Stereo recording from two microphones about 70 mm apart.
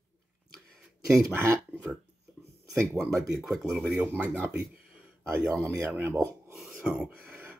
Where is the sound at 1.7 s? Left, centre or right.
Right.